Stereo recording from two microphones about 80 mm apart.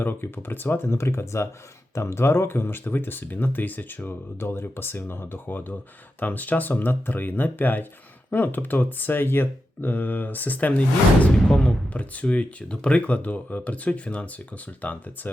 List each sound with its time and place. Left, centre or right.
0.0 s speech: left